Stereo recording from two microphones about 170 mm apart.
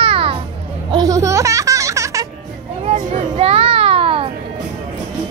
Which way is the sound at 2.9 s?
35° right (ahead or behind).